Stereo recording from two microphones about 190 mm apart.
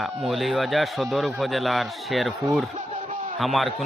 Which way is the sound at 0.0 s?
Centre (ahead or behind).